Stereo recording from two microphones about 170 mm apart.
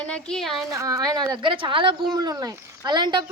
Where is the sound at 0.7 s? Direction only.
20° right (ahead or behind).